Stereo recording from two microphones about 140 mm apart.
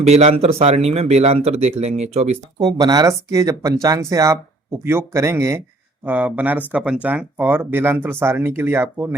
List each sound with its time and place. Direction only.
0.0 s speech: 50° right (ahead or behind)
2.6 s speech: 30° right (ahead or behind)